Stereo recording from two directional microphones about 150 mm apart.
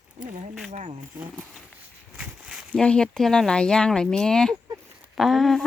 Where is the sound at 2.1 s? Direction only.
5° right (ahead or behind).